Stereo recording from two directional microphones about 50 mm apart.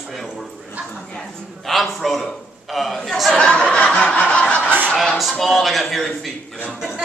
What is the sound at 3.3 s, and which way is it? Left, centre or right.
Snicker, centre.